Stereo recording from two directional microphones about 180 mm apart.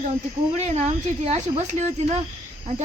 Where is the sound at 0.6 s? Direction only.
35° right (ahead or behind).